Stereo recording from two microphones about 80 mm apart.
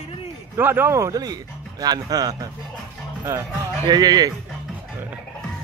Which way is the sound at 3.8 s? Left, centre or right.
Right.